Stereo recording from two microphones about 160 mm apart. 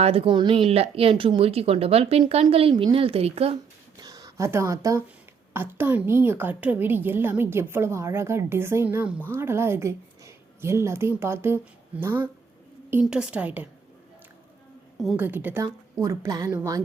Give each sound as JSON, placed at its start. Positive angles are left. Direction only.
{"t": 0.0, "sound": "speech", "side_deg": -35}
{"t": 4.0, "sound": "a woman's voice", "side_deg": -20}
{"t": 14.9, "sound": "a woman's voice", "side_deg": 0}
{"t": 15.2, "sound": "a woman's voice", "side_deg": -10}